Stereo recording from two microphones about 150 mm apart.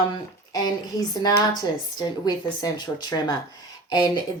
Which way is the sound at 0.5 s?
25° left (ahead or behind).